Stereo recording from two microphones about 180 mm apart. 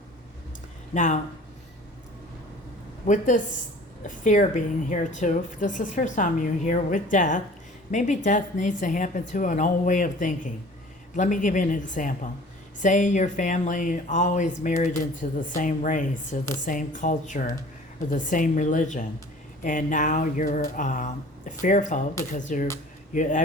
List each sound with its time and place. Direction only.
0.9 s speech: 45° left (ahead or behind)
3.1 s speech: 45° left (ahead or behind)